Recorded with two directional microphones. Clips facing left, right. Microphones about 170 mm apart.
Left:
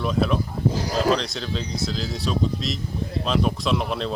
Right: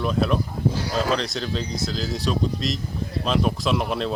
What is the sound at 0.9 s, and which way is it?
Speech, 40° left (ahead or behind).